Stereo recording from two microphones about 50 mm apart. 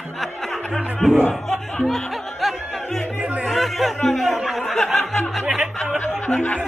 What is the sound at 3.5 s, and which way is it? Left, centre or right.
Speech, centre.